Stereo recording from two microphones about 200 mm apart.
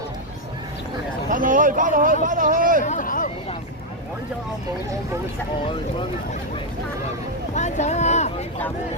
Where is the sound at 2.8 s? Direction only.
40° left (ahead or behind).